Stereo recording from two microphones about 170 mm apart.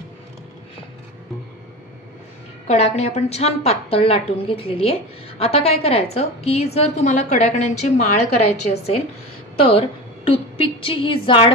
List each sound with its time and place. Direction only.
2.7 s a woman's voice: 40° left (ahead or behind)